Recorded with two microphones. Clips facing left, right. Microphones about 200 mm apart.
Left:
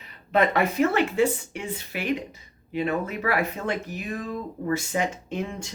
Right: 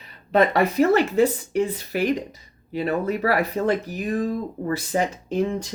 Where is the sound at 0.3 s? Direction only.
35° right (ahead or behind).